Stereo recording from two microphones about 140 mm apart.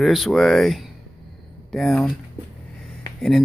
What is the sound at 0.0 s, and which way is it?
Speech, centre (ahead or behind).